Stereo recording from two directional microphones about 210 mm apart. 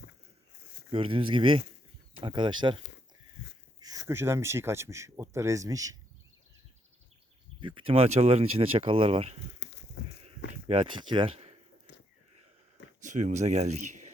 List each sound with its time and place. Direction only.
0.9 s speech: 25° right (ahead or behind)
7.6 s speech: 25° right (ahead or behind)
9.6 s goat: 55° left (ahead or behind)
10.5 s speech: 25° right (ahead or behind)
11.9 s a sound: 55° left (ahead or behind)
13.0 s speech: 35° right (ahead or behind)